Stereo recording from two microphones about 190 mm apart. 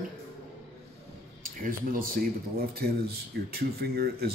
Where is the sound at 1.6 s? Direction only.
50° right (ahead or behind).